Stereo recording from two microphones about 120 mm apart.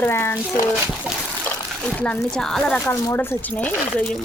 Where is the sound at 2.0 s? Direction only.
10° left (ahead or behind).